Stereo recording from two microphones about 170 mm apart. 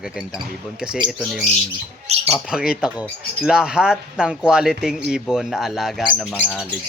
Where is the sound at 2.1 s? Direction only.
40° right (ahead or behind).